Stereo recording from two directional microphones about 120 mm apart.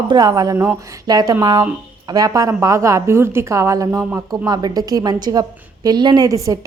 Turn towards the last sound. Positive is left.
turn(degrees=-25)  # may be behind; listen again after turning